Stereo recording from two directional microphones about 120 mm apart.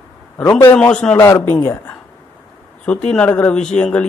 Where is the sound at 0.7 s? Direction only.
10° left (ahead or behind).